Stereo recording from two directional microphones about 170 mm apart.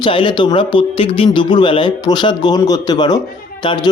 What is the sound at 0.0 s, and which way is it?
A man's voice, 30° left (ahead or behind).